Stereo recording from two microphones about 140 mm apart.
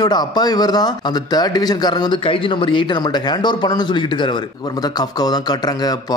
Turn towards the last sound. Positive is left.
turn(degrees=30)  # may be behind; listen again after turning